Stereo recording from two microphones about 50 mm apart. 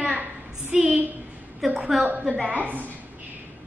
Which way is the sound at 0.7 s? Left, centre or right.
Centre.